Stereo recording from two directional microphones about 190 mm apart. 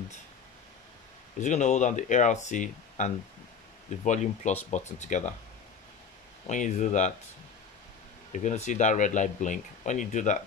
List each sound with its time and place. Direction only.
1.4 s speech: 40° left (ahead or behind)
6.4 s speech: 40° left (ahead or behind)
8.3 s speech: 40° left (ahead or behind)